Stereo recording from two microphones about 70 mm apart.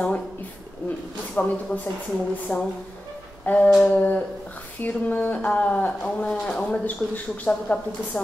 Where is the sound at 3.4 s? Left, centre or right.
Left.